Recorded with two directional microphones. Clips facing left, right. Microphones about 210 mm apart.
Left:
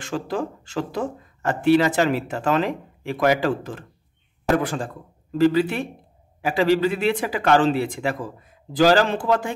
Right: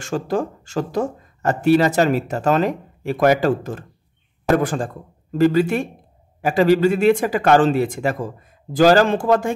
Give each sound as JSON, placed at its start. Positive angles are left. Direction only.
{"t": 0.0, "sound": "speech", "side_deg": -45}